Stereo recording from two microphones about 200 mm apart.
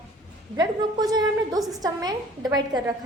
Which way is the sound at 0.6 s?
20° right (ahead or behind).